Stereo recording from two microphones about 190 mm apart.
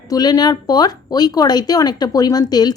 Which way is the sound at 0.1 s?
20° left (ahead or behind).